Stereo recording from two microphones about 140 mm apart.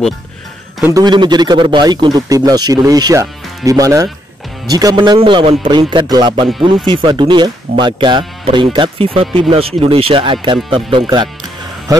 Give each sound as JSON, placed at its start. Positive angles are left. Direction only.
{"t": 0.9, "sound": "a man's voice", "side_deg": -30}